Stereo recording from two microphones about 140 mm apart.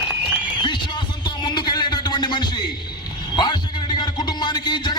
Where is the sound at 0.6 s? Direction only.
30° left (ahead or behind).